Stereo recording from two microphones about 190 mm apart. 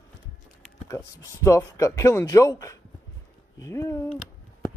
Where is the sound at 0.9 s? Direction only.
15° left (ahead or behind).